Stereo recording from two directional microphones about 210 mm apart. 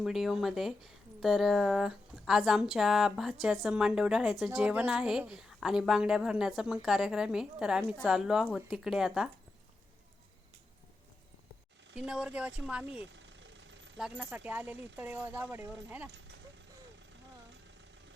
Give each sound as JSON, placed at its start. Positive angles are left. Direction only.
{"t": 0.0, "sound": "a woman's voice", "side_deg": 0}
{"t": 11.9, "sound": "a woman's voice", "side_deg": -5}
{"t": 13.1, "sound": "vehicle", "side_deg": -60}
{"t": 14.0, "sound": "speech", "side_deg": -10}